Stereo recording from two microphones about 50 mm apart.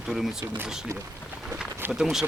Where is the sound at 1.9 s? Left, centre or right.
Centre.